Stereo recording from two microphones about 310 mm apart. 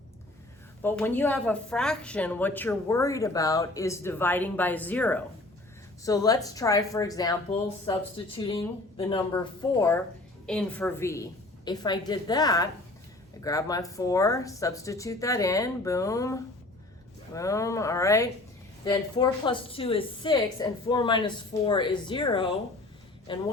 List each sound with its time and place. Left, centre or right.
0.8 s a woman's voice: centre